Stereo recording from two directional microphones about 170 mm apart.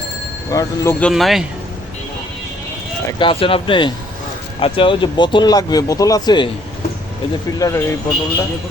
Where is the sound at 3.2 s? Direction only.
30° left (ahead or behind).